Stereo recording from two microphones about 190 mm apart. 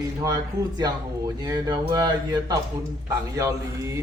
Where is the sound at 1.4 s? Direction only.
20° right (ahead or behind).